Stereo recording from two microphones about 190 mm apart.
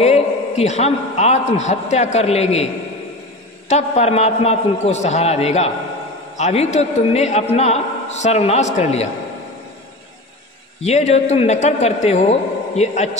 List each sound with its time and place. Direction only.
0.0 s a man's voice: 35° left (ahead or behind)
10.8 s a man's voice: 35° left (ahead or behind)